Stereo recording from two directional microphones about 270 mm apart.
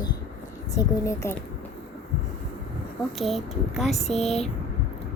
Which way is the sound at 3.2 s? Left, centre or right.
Centre.